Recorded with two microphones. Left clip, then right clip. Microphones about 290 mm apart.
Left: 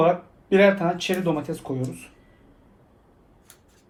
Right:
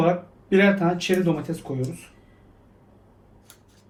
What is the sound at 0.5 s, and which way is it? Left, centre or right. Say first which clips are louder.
Speech: left 2 dB; centre.